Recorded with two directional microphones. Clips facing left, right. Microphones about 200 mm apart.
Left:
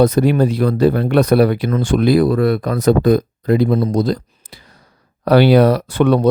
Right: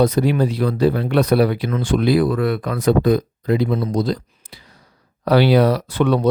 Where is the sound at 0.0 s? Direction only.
50° left (ahead or behind).